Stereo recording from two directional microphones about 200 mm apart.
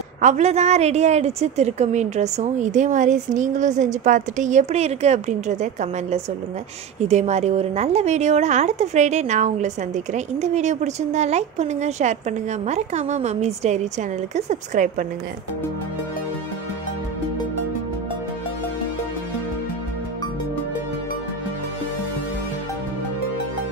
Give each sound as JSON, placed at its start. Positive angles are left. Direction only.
{"t": 0.2, "sound": "a woman's voice", "side_deg": -35}